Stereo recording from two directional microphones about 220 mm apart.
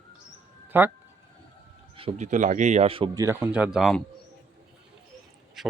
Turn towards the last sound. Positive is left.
turn(degrees=0)  # may be behind; listen again after turning